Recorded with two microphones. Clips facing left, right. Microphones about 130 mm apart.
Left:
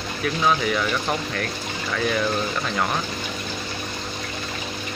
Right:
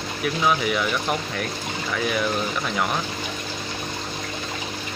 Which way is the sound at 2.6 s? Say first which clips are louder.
Even; 10° right (ahead or behind).